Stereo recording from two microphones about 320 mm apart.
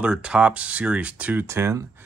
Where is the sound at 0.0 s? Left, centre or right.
Centre.